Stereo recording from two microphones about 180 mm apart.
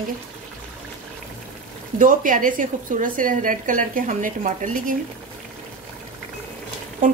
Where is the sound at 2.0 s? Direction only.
50° right (ahead or behind).